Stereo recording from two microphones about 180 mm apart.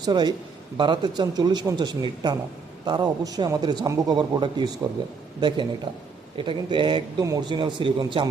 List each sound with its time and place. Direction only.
0.0 s a man's voice: 25° right (ahead or behind)